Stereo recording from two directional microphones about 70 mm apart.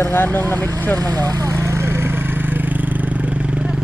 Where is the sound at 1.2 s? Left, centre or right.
Right.